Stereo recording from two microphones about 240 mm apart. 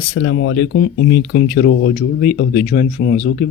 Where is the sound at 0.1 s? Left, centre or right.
Left.